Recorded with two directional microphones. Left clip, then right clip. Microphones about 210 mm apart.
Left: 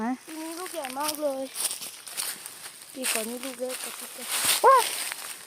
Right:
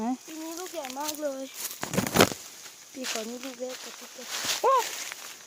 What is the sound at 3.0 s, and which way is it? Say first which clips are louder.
Speech: left 3 dB; 55° left (ahead or behind).